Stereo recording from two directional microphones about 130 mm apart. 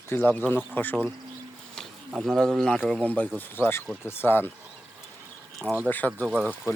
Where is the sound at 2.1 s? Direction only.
Centre (ahead or behind); by 4.5 s 15° left (ahead or behind).